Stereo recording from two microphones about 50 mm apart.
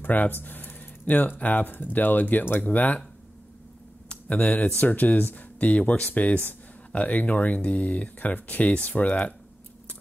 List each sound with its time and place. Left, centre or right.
0.0 s a sound: left
1.4 s speech: left
4.1 s speech: left